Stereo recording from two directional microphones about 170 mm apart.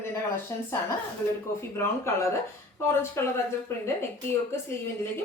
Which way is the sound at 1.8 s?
15° left (ahead or behind).